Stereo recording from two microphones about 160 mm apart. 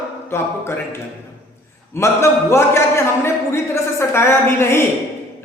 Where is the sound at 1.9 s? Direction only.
15° left (ahead or behind).